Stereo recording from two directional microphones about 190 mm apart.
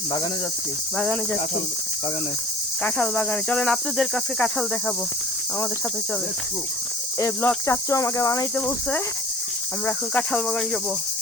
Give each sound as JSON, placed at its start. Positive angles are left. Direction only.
{"t": 0.9, "sound": "cricket", "side_deg": 5}
{"t": 2.8, "sound": "cricket", "side_deg": 10}
{"t": 7.2, "sound": "cricket", "side_deg": 15}
{"t": 9.8, "sound": "cricket", "side_deg": 5}